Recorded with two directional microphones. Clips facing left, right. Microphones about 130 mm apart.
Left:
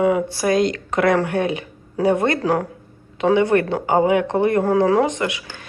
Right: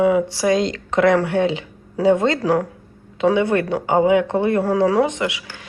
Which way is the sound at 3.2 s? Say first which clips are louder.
Left 1 dB; 20° left (ahead or behind).